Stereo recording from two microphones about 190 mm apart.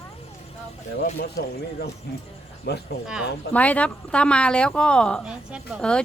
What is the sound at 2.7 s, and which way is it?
Speech, 60° left (ahead or behind).